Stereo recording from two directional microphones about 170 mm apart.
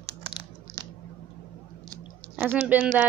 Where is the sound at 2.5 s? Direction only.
10° right (ahead or behind).